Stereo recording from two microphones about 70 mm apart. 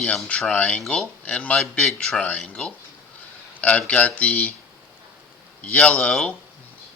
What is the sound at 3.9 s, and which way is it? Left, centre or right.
Speech, centre.